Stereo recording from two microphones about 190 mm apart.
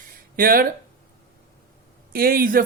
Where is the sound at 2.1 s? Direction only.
50° right (ahead or behind).